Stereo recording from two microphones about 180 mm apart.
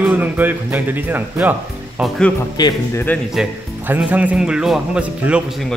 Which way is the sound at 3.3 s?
5° right (ahead or behind).